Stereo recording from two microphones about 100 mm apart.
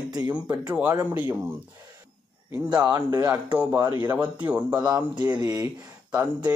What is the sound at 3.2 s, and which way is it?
Speech, 20° right (ahead or behind).